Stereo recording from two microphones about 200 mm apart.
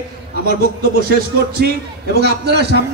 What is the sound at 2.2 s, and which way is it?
Speech, 55° right (ahead or behind).